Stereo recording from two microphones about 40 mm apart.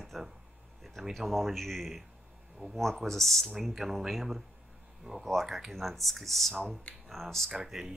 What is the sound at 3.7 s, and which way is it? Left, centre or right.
Speech, centre.